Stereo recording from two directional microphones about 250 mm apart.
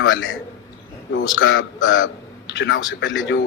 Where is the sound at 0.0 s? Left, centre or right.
Left.